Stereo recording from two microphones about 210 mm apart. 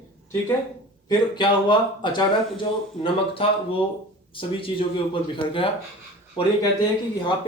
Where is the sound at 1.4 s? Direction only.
20° left (ahead or behind).